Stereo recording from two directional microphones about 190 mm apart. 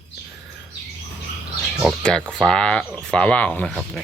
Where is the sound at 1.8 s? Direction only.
5° left (ahead or behind).